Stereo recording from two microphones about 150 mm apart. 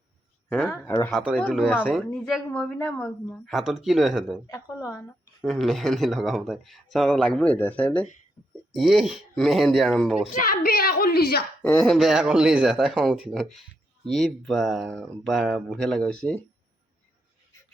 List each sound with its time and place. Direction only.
0.5 s speech: 10° left (ahead or behind)
1.9 s speech: centre (ahead or behind)
4.5 s a sound: 20° left (ahead or behind)
5.4 s speech: centre (ahead or behind)
8.7 s speech: centre (ahead or behind)
10.3 s a woman's voice: 70° left (ahead or behind); by 11.4 s 90° left
11.6 s speech: 10° left (ahead or behind)
11.9 s speech: centre (ahead or behind)